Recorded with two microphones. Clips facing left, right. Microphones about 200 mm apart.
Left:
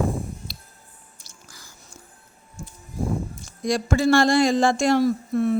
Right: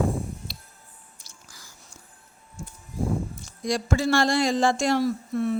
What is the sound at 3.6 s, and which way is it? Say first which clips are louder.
Speech: left 3 dB; 50° left (ahead or behind).